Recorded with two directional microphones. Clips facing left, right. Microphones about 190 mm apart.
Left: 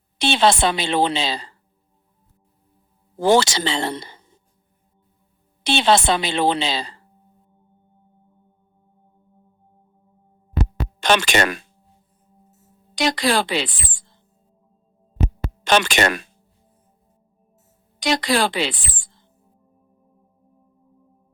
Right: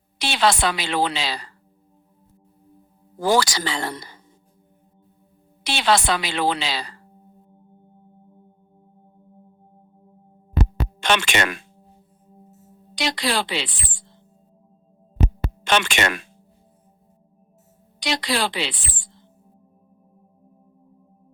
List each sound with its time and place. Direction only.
0.2 s a woman's voice: 25° left (ahead or behind)
3.2 s a woman's voice: 25° left (ahead or behind)
5.6 s a woman's voice: 25° left (ahead or behind)
11.0 s speech: 40° left (ahead or behind)
13.0 s a woman's voice: 45° left (ahead or behind)
15.6 s speech: 40° left (ahead or behind)
18.0 s a woman's voice: 45° left (ahead or behind)